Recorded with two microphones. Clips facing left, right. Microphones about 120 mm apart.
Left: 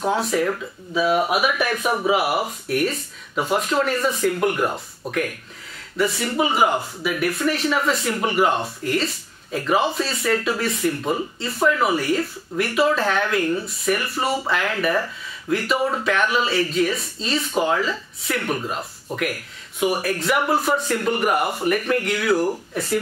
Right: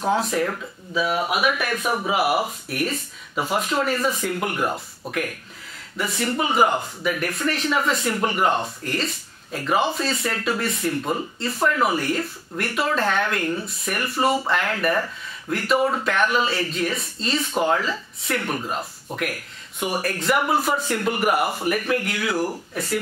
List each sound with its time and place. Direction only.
0.0 s speech: centre (ahead or behind)
0.9 s speech: 25° left (ahead or behind)
2.0 s speech: centre (ahead or behind)